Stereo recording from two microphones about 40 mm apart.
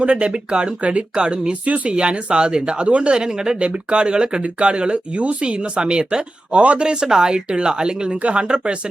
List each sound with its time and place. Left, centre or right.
0.0 s speech: right
2.0 s speech: right